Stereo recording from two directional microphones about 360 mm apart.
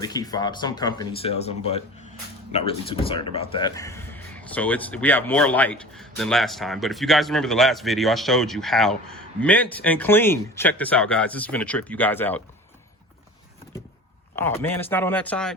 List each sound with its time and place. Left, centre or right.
0.0 s speech: centre
14.3 s speech: centre